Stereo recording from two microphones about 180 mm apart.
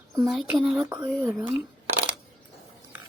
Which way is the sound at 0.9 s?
15° right (ahead or behind).